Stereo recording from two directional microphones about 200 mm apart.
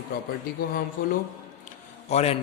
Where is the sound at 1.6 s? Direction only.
35° left (ahead or behind).